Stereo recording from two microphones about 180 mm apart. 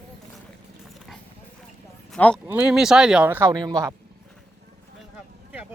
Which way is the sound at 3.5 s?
25° right (ahead or behind).